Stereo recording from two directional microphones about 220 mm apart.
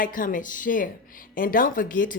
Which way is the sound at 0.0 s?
40° left (ahead or behind).